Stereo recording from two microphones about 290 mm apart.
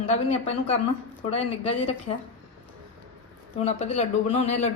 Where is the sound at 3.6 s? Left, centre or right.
Left.